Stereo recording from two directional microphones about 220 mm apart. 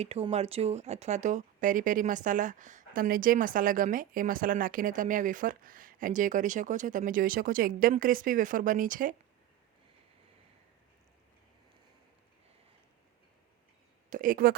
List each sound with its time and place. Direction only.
0.0 s speech: 30° right (ahead or behind)
14.1 s speech: 40° right (ahead or behind)